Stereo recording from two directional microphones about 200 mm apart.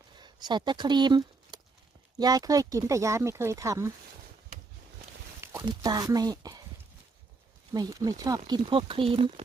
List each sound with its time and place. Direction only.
0.2 s speech: 20° right (ahead or behind)
5.4 s speech: 15° right (ahead or behind)
7.7 s speech: 20° right (ahead or behind)